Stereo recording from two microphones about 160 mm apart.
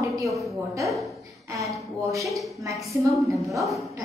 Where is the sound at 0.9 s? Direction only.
Centre (ahead or behind).